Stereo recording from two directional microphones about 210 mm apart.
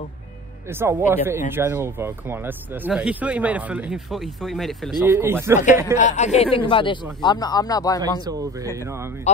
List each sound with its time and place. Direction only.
0.7 s speech: 10° right (ahead or behind)
5.0 s speech: 10° right (ahead or behind)
5.9 s speech: 35° left (ahead or behind); by 8.0 s 15° left (ahead or behind)
8.0 s speech: 15° right (ahead or behind)